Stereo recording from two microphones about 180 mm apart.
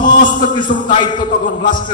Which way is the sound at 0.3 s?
25° left (ahead or behind).